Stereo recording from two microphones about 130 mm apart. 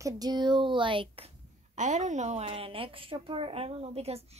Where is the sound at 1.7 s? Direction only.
70° right (ahead or behind).